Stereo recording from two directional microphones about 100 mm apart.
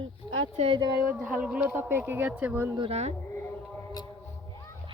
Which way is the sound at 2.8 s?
90° right.